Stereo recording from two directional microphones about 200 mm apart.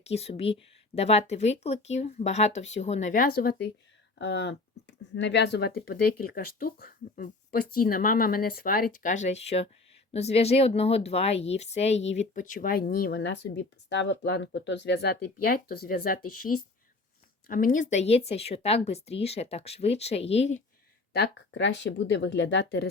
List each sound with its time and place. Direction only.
0.0 s speech: 30° left (ahead or behind)
17.5 s speech: 40° left (ahead or behind)
21.1 s speech: 60° left (ahead or behind)